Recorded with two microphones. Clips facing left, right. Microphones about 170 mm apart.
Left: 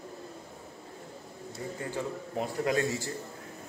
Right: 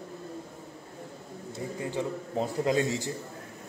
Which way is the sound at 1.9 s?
20° right (ahead or behind).